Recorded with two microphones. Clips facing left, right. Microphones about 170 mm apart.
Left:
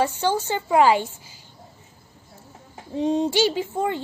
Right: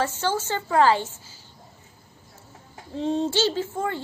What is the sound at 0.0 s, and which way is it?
A child's voice, 15° left (ahead or behind).